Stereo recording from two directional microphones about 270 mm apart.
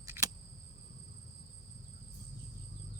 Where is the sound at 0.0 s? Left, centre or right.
Centre.